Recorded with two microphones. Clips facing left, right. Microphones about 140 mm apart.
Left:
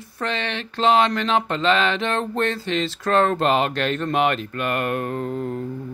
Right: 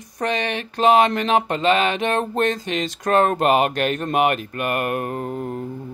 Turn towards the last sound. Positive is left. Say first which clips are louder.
# left 1 dB
turn(degrees=-20)  # may be behind; listen again after turning